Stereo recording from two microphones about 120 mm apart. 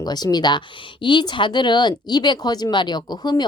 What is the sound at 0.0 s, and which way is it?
Speech, 35° left (ahead or behind).